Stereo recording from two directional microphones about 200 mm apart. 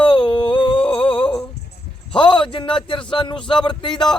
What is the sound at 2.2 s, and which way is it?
Speech, 25° left (ahead or behind).